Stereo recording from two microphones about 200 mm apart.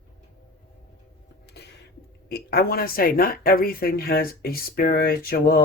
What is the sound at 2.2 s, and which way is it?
Speech, 50° left (ahead or behind).